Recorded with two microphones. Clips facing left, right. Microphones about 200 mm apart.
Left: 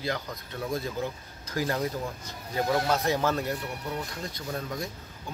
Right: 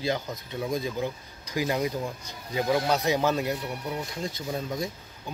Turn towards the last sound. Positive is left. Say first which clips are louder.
# right 3 dB
turn(degrees=-20)  # may be behind; listen again after turning